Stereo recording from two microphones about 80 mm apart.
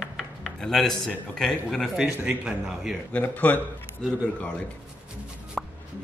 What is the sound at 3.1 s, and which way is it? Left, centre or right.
Speech, centre.